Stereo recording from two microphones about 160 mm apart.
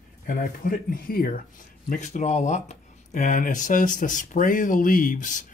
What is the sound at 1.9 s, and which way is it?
Speech, 50° left (ahead or behind).